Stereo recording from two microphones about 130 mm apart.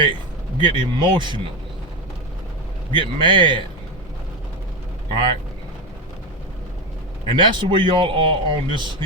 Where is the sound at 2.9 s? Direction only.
40° right (ahead or behind).